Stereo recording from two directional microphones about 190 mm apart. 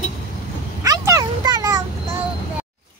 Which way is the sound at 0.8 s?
15° right (ahead or behind).